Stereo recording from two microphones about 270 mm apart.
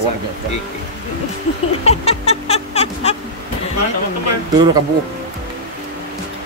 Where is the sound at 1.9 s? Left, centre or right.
Left.